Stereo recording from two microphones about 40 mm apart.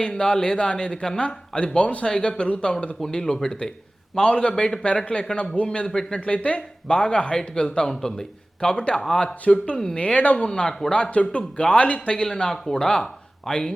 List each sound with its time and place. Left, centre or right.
0.1 s a man's voice: centre
2.0 s a man's voice: centre
9.4 s speech: left
9.7 s speech: centre
10.9 s a man's voice: left